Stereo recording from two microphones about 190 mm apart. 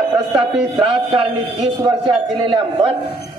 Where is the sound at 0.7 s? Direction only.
30° right (ahead or behind).